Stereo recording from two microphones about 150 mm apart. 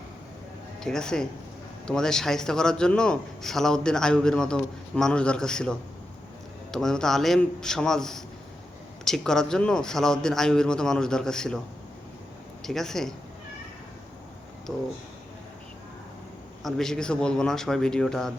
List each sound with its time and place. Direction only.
0.8 s a man's voice: 5° left (ahead or behind)
12.6 s a man's voice: centre (ahead or behind)
16.6 s a man's voice: 5° left (ahead or behind)